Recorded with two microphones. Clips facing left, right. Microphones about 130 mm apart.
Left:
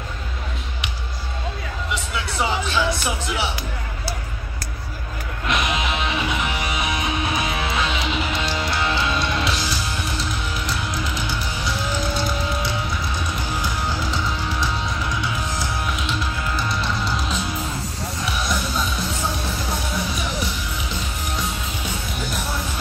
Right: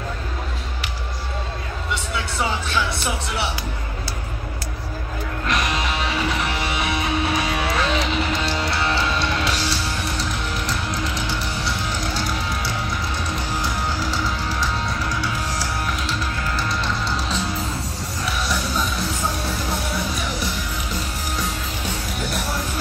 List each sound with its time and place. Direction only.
5.5 s music: 40° right (ahead or behind)
7.0 s music: 15° left (ahead or behind)
7.9 s music: 35° right (ahead or behind)